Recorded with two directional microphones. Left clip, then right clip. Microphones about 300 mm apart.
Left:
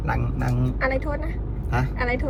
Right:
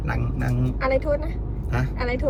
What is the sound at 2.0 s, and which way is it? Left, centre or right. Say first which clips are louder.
Speech: left 1 dB; centre.